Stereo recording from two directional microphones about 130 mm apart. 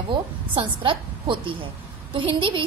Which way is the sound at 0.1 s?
40° right (ahead or behind).